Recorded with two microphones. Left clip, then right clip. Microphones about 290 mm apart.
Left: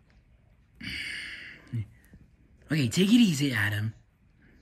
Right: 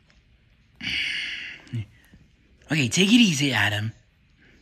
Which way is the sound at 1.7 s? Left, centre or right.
Left.